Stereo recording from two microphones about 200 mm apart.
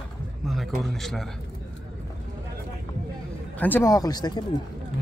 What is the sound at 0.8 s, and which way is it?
Speech, centre (ahead or behind).